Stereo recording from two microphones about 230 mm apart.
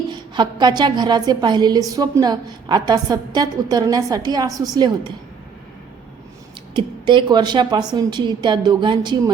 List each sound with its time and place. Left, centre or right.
0.1 s a woman's voice: centre
6.7 s a woman's voice: right